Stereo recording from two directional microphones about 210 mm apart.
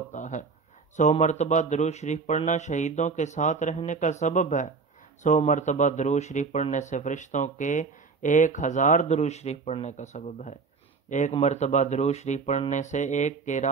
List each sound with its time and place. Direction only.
0.1 s speech: 35° left (ahead or behind)